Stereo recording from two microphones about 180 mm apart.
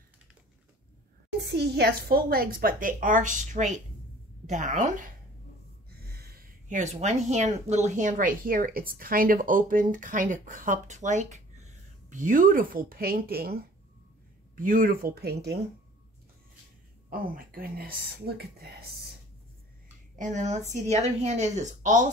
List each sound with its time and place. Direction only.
1.4 s a woman's voice: 65° right (ahead or behind); by 5.1 s 45° right (ahead or behind)
5.9 s a sound: 60° right (ahead or behind); by 7.5 s 40° right (ahead or behind)
7.7 s a woman's voice: 40° right (ahead or behind); by 15.6 s 65° right (ahead or behind)
17.1 s speech: 55° right (ahead or behind)
20.2 s speech: 40° right (ahead or behind)